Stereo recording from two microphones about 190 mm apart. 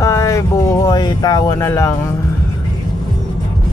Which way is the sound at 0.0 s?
15° left (ahead or behind).